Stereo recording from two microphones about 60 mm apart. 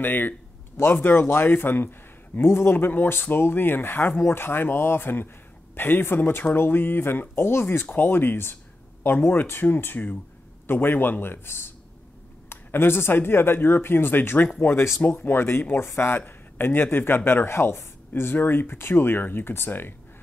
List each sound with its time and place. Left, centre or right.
0.0 s speech: left